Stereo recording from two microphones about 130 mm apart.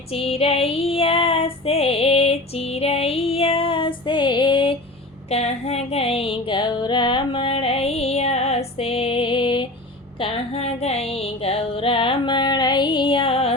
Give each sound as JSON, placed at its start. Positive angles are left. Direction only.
{"t": 0.1, "sound": "female singing", "side_deg": 50}
{"t": 5.3, "sound": "music", "side_deg": 55}
{"t": 10.2, "sound": "music", "side_deg": 50}